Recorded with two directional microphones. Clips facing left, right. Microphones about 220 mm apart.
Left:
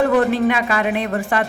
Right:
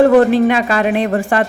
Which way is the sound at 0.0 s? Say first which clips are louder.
Right 6 dB; 35° right (ahead or behind).